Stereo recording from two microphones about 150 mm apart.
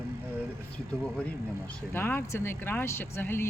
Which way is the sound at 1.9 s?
15° left (ahead or behind).